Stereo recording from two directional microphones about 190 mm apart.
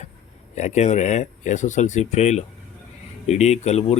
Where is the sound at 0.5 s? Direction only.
35° left (ahead or behind).